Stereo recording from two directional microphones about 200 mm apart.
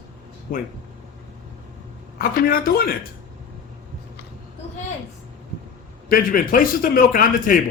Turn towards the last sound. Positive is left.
turn(degrees=45)  # may be behind; listen again after turning